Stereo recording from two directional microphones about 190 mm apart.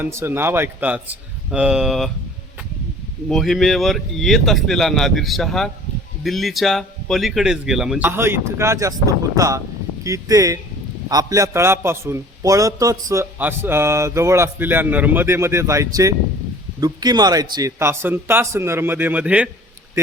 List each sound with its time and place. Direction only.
0.0 s a man's voice: 15° right (ahead or behind)
3.2 s a man's voice: centre (ahead or behind)